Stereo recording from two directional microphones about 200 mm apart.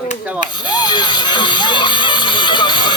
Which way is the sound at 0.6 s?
20° left (ahead or behind).